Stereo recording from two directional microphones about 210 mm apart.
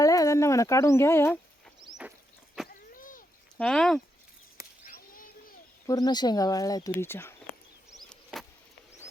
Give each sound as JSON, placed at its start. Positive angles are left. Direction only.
{"t": 0.0, "sound": "speech", "side_deg": 15}
{"t": 2.6, "sound": "vehicle", "side_deg": 40}
{"t": 3.6, "sound": "speech", "side_deg": 5}
{"t": 4.9, "sound": "a sound", "side_deg": 45}
{"t": 5.8, "sound": "speech", "side_deg": 15}
{"t": 7.9, "sound": "a sound", "side_deg": 0}